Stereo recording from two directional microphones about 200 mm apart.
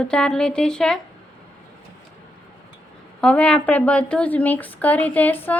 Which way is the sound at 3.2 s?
5° left (ahead or behind).